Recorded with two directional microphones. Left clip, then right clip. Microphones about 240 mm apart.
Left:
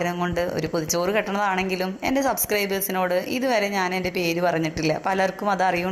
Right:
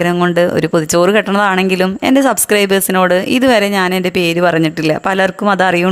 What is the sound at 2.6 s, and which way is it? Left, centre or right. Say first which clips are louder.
Speech: right 12 dB; right.